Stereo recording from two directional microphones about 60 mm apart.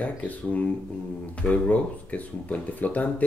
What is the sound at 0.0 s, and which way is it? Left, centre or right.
Speech, left.